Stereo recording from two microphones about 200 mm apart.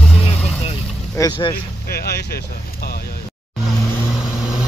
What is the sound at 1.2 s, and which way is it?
Speech, 25° left (ahead or behind).